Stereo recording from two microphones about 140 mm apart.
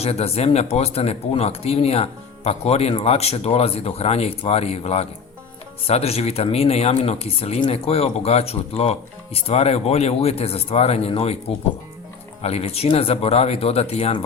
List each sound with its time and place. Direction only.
0.0 s speech: 45° left (ahead or behind)